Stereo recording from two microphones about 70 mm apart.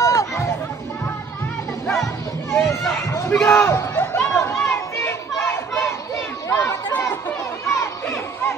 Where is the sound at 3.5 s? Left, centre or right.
Left.